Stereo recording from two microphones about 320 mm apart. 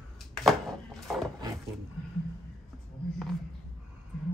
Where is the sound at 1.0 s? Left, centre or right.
Centre.